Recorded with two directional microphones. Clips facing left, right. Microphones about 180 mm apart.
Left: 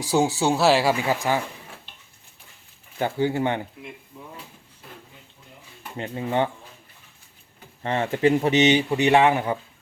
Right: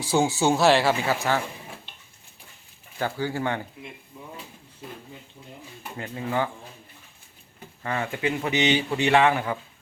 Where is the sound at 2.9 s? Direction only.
20° left (ahead or behind).